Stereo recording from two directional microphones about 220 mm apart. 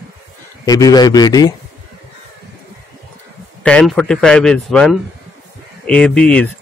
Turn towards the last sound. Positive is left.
turn(degrees=5)  # may be behind; listen again after turning